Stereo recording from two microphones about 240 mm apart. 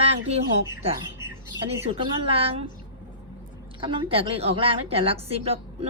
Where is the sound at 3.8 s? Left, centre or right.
Right.